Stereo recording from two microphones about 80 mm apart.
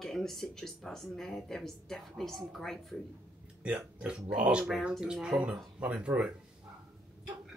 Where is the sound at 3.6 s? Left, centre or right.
Centre.